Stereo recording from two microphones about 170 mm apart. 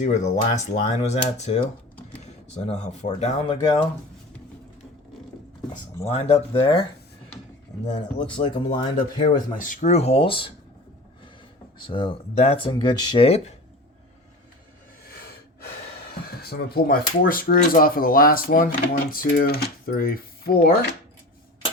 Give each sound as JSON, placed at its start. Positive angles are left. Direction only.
{"t": 0.0, "sound": "speech", "side_deg": 45}
{"t": 2.6, "sound": "speech", "side_deg": 40}
{"t": 3.5, "sound": "speech", "side_deg": 25}
{"t": 6.1, "sound": "speech", "side_deg": 35}
{"t": 8.2, "sound": "speech", "side_deg": 30}
{"t": 9.5, "sound": "speech", "side_deg": 50}
{"t": 11.8, "sound": "speech", "side_deg": 30}
{"t": 16.4, "sound": "speech", "side_deg": 65}